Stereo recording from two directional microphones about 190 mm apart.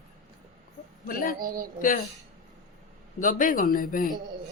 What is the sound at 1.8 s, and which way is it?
Speech, 45° left (ahead or behind).